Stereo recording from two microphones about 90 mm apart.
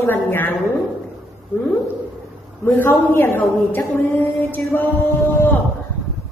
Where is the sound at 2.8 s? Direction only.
20° left (ahead or behind).